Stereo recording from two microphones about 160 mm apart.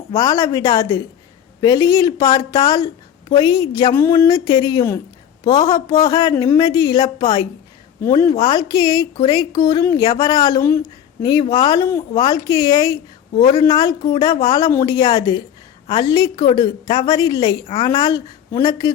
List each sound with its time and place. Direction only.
0.1 s speech: 20° left (ahead or behind)